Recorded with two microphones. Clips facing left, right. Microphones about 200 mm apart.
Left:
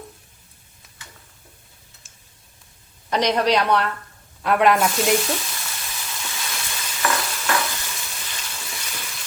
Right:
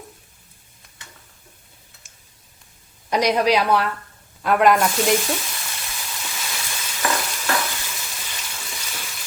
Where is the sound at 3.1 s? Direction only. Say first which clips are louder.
Right 1 dB; 10° right (ahead or behind).